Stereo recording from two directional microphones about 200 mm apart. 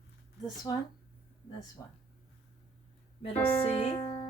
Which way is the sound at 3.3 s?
10° left (ahead or behind).